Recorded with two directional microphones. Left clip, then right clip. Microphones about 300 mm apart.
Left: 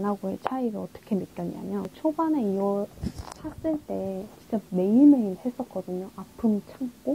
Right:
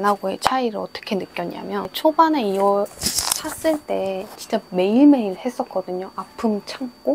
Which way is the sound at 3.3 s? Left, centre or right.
Centre.